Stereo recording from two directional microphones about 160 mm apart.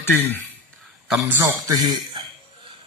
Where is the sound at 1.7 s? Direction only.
25° right (ahead or behind).